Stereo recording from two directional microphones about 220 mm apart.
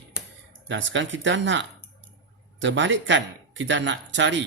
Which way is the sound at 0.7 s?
55° right (ahead or behind).